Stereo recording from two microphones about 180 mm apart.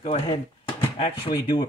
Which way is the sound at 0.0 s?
30° left (ahead or behind).